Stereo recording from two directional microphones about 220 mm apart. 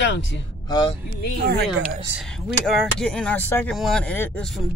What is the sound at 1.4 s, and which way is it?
Speech, 45° right (ahead or behind).